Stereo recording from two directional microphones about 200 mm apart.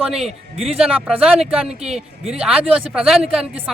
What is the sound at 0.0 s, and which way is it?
A man's voice, centre (ahead or behind).